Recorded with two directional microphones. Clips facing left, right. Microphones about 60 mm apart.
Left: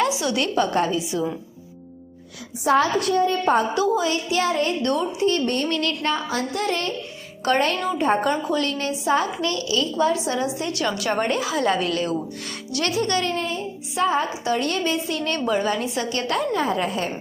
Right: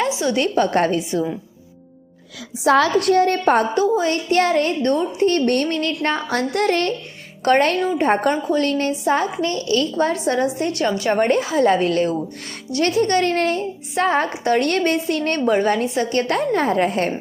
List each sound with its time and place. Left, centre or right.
0.0 s a woman's voice: right
2.6 s a woman's voice: right
3.8 s a woman's voice: right
4.8 s a woman's voice: right
5.2 s a woman's voice: right
5.6 s a woman's voice: right
6.2 s a woman's voice: right
9.7 s a woman's voice: right
13.3 s a woman's voice: right